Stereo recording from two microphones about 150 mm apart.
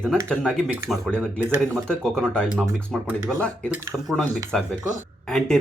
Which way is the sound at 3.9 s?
Centre (ahead or behind).